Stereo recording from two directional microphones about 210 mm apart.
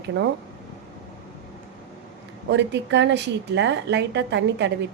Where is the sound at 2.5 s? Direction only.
55° right (ahead or behind).